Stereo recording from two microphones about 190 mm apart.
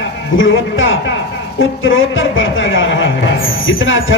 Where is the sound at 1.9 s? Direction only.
90° left; by 3.1 s 75° left (ahead or behind).